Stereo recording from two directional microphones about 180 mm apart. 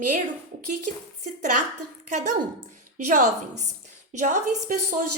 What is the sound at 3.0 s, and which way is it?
A woman's voice, 45° right (ahead or behind).